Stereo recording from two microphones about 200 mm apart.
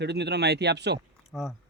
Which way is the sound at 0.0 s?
55° right (ahead or behind).